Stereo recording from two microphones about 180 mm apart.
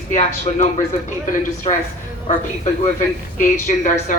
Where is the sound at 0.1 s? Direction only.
40° left (ahead or behind).